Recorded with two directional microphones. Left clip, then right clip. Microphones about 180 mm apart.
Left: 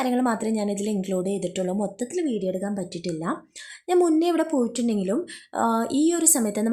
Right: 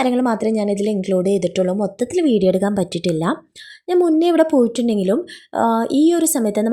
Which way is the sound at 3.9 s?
20° right (ahead or behind).